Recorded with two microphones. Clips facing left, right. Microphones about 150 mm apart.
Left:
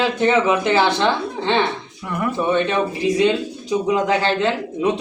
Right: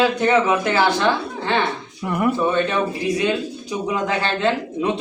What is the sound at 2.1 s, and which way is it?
Speech, 15° right (ahead or behind).